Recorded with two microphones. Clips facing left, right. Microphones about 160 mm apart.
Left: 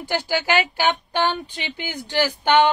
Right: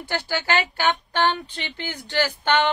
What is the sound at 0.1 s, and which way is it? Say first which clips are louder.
A woman's voice: left 3 dB; 10° left (ahead or behind).